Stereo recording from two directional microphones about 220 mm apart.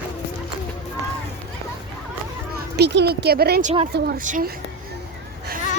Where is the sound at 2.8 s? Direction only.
50° right (ahead or behind).